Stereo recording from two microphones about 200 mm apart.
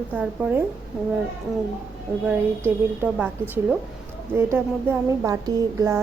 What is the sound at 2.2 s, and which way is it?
A woman's voice, 10° right (ahead or behind).